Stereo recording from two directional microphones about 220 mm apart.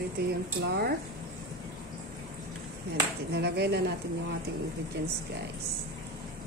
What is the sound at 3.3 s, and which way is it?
Speech, 50° right (ahead or behind).